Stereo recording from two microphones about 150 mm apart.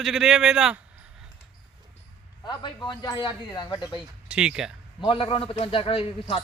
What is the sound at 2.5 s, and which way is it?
Speech, 30° left (ahead or behind).